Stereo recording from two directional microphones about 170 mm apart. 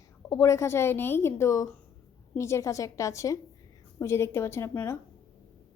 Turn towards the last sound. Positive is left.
turn(degrees=15)  # may be behind; listen again after turning